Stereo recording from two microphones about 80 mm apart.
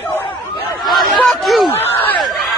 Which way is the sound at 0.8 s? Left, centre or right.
Centre.